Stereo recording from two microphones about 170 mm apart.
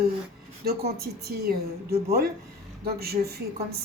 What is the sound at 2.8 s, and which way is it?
Speech, 65° right (ahead or behind).